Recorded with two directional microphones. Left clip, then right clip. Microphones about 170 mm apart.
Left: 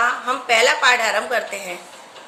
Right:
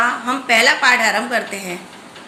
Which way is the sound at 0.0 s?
10° left (ahead or behind).